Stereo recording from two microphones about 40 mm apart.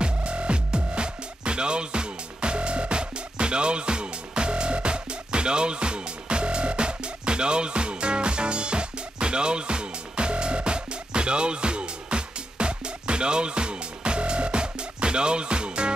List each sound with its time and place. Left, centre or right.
0.0 s music: right